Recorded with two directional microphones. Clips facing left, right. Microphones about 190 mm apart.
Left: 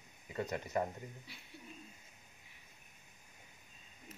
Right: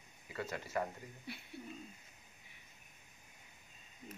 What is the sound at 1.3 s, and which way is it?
Speech, 55° right (ahead or behind).